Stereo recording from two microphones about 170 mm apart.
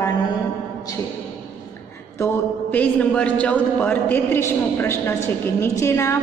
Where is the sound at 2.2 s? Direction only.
10° left (ahead or behind).